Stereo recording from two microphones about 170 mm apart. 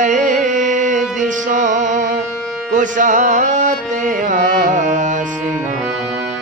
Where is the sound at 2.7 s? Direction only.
50° right (ahead or behind).